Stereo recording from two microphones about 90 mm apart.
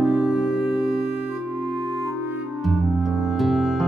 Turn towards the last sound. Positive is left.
turn(degrees=0)  # may be behind; listen again after turning